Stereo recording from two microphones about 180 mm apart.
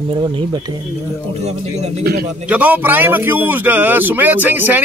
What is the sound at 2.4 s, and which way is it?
A man's voice, 10° right (ahead or behind).